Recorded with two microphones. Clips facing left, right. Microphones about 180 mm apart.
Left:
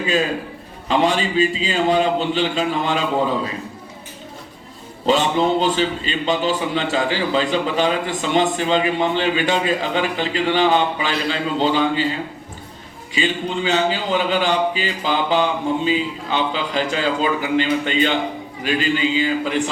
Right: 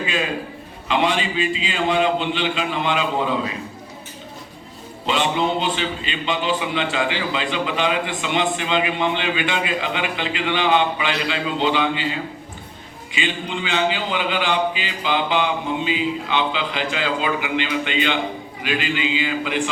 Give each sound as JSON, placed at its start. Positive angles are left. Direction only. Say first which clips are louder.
{"t": 0.0, "sound": "a man's voice", "louder": "left 4 dB", "side_deg": 40}
{"t": 5.0, "sound": "a man's voice", "louder": "left 4 dB", "side_deg": 40}
{"t": 13.1, "sound": "a man's voice", "louder": "left 4 dB", "side_deg": 40}